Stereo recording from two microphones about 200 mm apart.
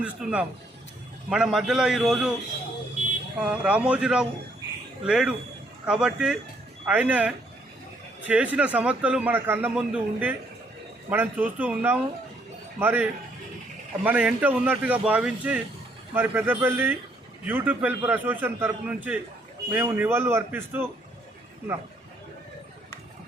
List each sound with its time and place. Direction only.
0.0 s a man's voice: 5° right (ahead or behind)
3.4 s a man's voice: 5° right (ahead or behind)